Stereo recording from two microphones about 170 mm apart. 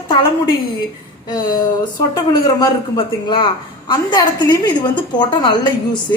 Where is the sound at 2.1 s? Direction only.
25° left (ahead or behind).